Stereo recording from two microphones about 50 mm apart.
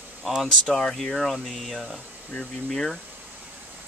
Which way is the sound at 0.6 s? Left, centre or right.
Centre.